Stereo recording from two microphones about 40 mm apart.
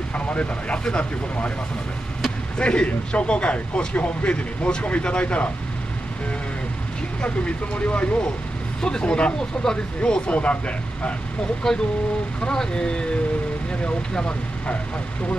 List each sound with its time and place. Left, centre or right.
0.1 s speech: left
2.6 s speech: left
7.2 s speech: left
11.6 s speech: centre
12.4 s speech: left